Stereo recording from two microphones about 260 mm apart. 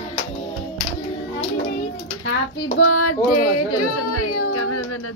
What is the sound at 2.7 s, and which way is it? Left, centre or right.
Speech, left.